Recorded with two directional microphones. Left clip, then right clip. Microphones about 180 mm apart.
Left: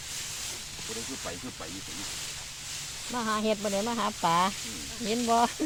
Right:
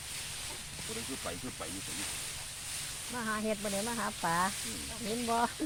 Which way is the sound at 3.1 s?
45° left (ahead or behind).